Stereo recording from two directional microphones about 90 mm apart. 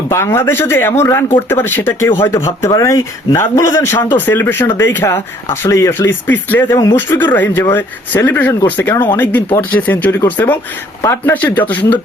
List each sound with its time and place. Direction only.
0.1 s speech: 30° left (ahead or behind)